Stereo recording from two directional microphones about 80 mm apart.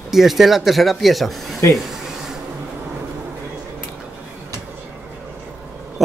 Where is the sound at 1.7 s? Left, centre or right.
Centre.